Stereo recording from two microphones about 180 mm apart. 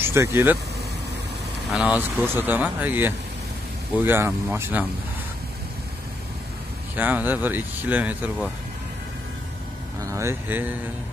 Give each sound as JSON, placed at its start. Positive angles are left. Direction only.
{"t": 0.0, "sound": "speech", "side_deg": -15}
{"t": 1.7, "sound": "speech", "side_deg": -5}
{"t": 7.0, "sound": "speech", "side_deg": -10}
{"t": 10.0, "sound": "speech", "side_deg": -15}